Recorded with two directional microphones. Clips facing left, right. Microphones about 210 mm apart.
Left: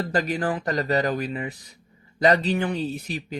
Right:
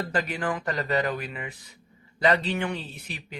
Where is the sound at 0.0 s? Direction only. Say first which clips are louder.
Left 4 dB; 40° left (ahead or behind).